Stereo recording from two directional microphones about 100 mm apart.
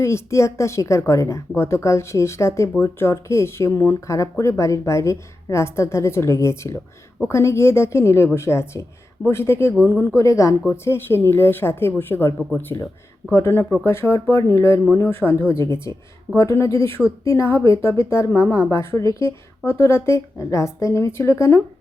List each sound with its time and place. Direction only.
0.0 s a woman's voice: 30° left (ahead or behind)
9.7 s speech: 10° right (ahead or behind)
10.2 s a woman's voice: 30° left (ahead or behind)